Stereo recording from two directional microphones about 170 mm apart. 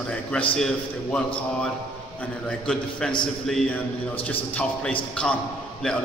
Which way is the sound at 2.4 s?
5° left (ahead or behind).